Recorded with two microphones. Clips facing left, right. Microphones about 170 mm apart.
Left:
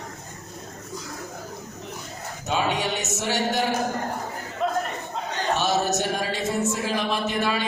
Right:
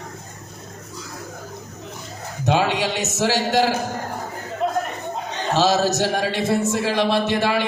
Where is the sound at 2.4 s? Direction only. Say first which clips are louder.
Right 5 dB; 80° right.